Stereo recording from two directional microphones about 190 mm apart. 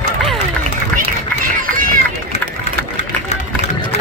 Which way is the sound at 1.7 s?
45° right (ahead or behind).